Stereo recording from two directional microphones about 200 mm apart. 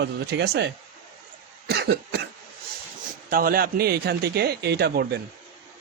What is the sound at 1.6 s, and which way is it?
Cough, 50° right (ahead or behind).